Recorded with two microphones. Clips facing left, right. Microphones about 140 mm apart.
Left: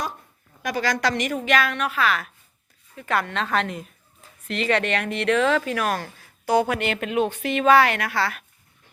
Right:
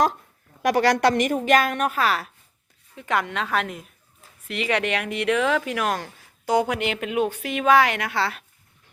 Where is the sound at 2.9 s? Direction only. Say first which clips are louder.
Even; 20° right (ahead or behind).